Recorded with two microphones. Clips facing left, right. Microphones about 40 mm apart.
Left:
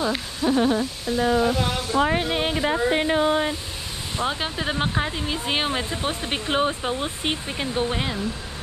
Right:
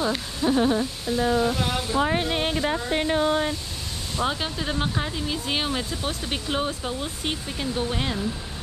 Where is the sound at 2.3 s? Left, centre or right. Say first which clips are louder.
Left 2 dB; left.